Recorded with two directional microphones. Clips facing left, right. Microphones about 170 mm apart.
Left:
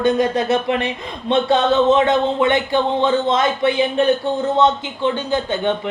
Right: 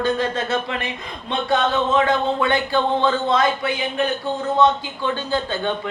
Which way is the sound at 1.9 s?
20° left (ahead or behind).